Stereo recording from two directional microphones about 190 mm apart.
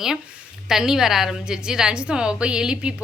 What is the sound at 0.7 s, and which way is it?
A woman's voice, centre (ahead or behind).